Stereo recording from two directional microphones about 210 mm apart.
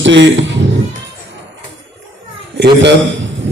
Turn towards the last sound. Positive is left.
turn(degrees=-60)  # may be behind; listen again after turning